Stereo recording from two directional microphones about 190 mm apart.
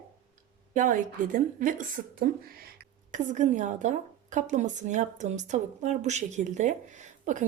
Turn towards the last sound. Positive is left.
turn(degrees=-40)  # may be behind; listen again after turning